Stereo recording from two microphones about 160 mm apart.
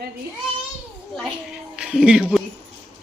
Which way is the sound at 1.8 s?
5° right (ahead or behind).